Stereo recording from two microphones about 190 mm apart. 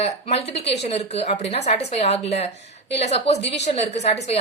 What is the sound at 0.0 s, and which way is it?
A woman's voice, 35° left (ahead or behind).